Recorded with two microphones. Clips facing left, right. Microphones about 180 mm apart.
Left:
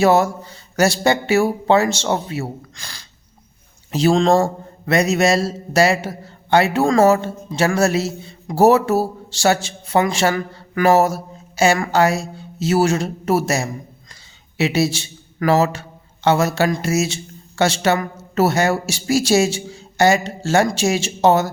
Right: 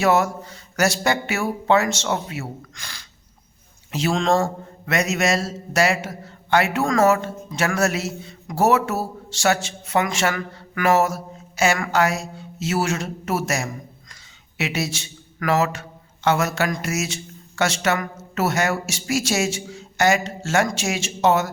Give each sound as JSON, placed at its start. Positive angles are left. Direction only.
{"t": 0.0, "sound": "a man's voice", "side_deg": 30}